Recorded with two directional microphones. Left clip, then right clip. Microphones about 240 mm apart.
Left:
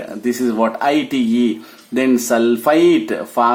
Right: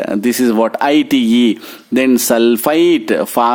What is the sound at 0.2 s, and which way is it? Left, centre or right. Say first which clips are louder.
Speech: right 2 dB; right.